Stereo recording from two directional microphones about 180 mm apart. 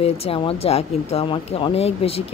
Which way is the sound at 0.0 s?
35° left (ahead or behind).